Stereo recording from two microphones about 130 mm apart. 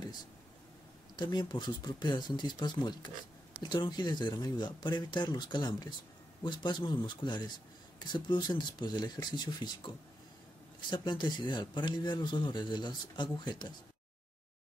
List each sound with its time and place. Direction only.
1.1 s speech: 35° left (ahead or behind)